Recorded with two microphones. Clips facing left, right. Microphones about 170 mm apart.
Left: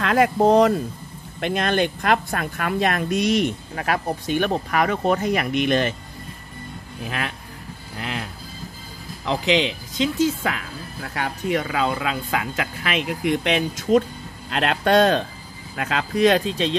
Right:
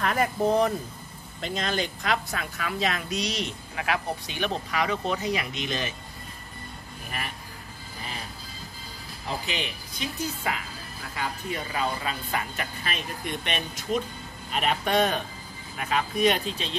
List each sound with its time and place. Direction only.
0.0 s speech: 90° left
1.4 s speech: 60° left (ahead or behind)
7.1 s speech: 90° left
8.0 s music: 90° left
9.2 s speech: 90° left